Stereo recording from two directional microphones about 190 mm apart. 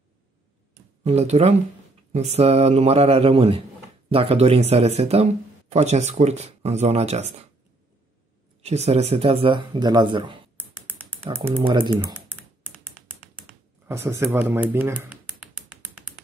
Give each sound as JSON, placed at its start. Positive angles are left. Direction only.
{"t": 1.0, "sound": "speech", "side_deg": -35}
{"t": 8.6, "sound": "speech", "side_deg": -35}
{"t": 10.6, "sound": "typing", "side_deg": -10}
{"t": 11.6, "sound": "speech", "side_deg": -25}
{"t": 12.0, "sound": "typing", "side_deg": -10}
{"t": 13.8, "sound": "speech", "side_deg": -15}